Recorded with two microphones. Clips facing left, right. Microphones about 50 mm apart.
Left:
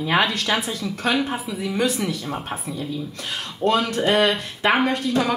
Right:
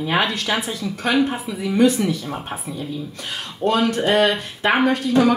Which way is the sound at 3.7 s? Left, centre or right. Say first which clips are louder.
Right 2 dB; right.